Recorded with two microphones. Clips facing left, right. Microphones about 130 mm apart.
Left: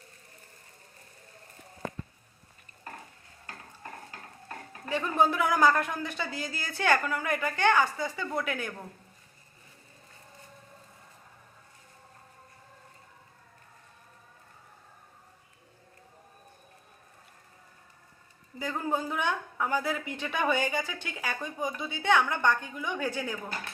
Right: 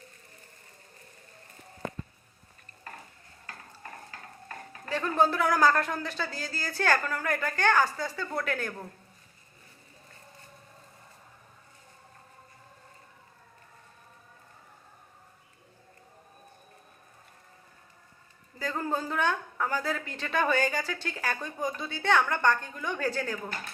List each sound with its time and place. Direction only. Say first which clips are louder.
4.4 s a woman's voice: left 1 dB; 15° left (ahead or behind)
18.6 s a woman's voice: even; 15° left (ahead or behind)